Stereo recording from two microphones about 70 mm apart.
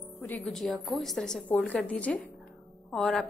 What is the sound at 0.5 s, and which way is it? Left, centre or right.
Speech, centre.